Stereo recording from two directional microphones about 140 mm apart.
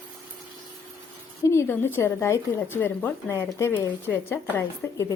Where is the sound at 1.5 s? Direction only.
15° left (ahead or behind).